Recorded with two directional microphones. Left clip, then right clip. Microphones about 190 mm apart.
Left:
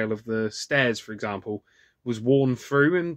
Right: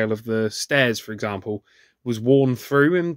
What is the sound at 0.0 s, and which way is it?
Speech, 50° right (ahead or behind).